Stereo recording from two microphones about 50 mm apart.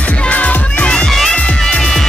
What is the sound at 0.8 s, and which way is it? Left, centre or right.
Music, centre.